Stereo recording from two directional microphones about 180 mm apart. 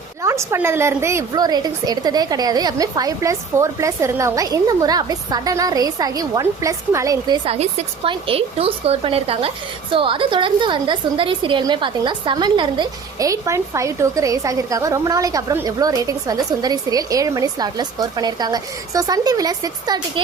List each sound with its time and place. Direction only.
0.2 s a woman's voice: 15° right (ahead or behind)
7.4 s a woman's voice: 35° right (ahead or behind)